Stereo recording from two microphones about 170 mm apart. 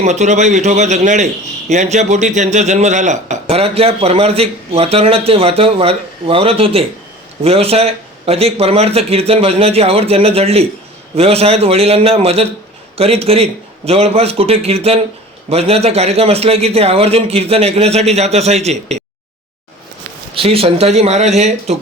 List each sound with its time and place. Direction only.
0.0 s a man's voice: 45° right (ahead or behind)
20.3 s a man's voice: 35° right (ahead or behind)